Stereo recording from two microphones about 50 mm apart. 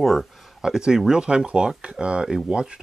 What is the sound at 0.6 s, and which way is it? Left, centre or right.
Speech, centre.